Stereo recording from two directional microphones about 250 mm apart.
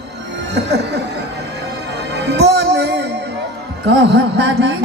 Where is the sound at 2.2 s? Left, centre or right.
Right.